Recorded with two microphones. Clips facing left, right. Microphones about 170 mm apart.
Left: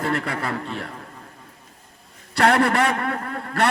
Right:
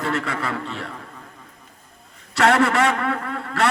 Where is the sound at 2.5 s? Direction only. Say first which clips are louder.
Right 1 dB; 55° left (ahead or behind).